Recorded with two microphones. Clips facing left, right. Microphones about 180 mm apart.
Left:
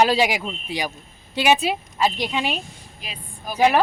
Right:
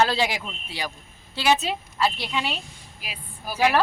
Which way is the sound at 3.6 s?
15° left (ahead or behind).